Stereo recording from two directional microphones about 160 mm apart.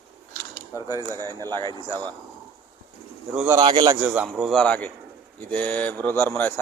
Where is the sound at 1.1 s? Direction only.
25° right (ahead or behind).